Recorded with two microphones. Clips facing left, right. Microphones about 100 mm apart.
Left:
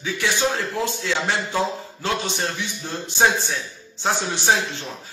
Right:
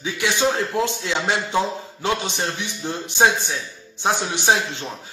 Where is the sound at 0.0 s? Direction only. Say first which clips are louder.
Right 2 dB; 20° right (ahead or behind).